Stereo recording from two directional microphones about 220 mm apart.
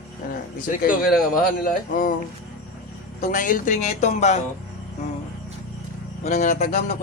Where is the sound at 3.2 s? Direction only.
35° left (ahead or behind).